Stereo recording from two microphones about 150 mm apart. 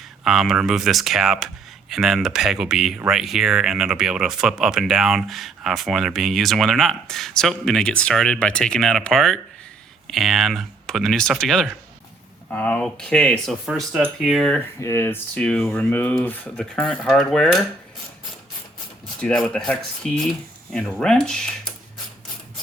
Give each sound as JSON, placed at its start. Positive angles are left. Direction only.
{"t": 0.3, "sound": "speech", "side_deg": -5}
{"t": 14.8, "sound": "speech", "side_deg": 20}
{"t": 15.4, "sound": "speech", "side_deg": 5}
{"t": 19.2, "sound": "speech", "side_deg": 5}